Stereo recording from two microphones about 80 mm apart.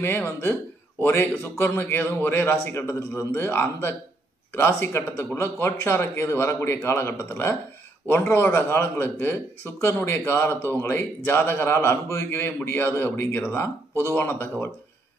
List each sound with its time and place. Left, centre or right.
0.0 s a man's voice: left